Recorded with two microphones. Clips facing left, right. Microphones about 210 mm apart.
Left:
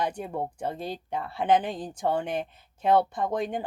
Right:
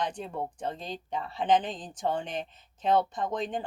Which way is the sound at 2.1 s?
60° left (ahead or behind).